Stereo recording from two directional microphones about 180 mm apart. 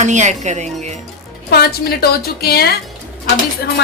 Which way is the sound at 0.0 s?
40° right (ahead or behind).